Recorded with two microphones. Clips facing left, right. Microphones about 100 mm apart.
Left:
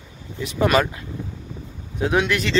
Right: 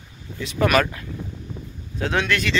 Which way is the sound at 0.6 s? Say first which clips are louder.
Even; 20° left (ahead or behind).